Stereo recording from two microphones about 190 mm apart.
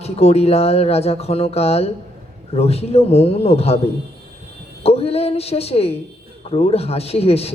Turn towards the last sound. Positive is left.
turn(degrees=30)  # may be behind; listen again after turning